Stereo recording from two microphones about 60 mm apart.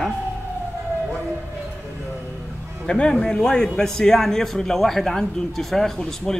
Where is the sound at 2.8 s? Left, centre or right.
Centre.